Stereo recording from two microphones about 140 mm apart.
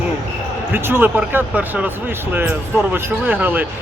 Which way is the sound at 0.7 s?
15° right (ahead or behind).